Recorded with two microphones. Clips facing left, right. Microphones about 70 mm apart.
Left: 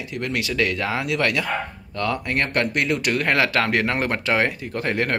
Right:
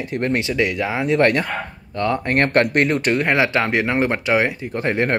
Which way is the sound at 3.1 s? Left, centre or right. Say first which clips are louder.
Even; centre.